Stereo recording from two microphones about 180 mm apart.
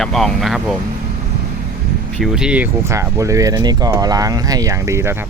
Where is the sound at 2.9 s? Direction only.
15° right (ahead or behind).